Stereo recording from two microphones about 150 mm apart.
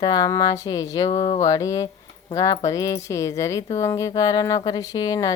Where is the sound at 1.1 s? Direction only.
45° left (ahead or behind).